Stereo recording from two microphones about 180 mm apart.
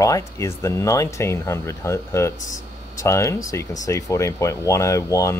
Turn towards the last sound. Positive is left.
turn(degrees=15)  # may be behind; listen again after turning